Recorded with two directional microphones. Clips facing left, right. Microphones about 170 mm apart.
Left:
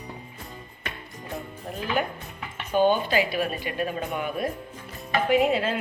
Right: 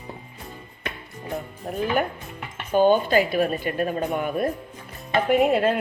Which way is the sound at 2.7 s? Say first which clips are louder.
Right 4 dB; 45° right (ahead or behind).